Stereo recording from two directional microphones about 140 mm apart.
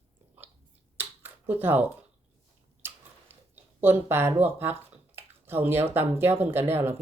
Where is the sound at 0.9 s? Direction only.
15° right (ahead or behind).